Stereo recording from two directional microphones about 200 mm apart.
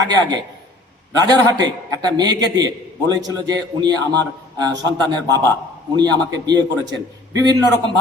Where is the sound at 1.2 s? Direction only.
20° right (ahead or behind).